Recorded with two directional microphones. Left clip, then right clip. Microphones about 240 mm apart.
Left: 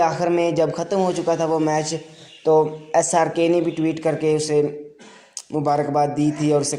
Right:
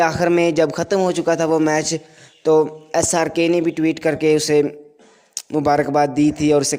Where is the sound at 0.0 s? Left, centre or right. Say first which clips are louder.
Right 3 dB; right.